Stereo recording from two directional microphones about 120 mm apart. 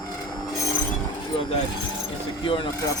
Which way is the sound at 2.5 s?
45° left (ahead or behind).